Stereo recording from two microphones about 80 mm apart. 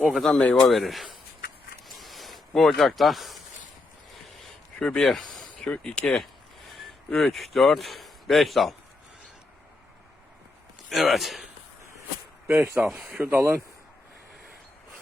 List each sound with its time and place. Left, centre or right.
0.0 s a man's voice: centre
1.9 s a sound: centre
2.6 s a man's voice: centre
4.8 s speech: centre
5.6 s a man's voice: centre
10.8 s a man's voice: centre
12.5 s speech: right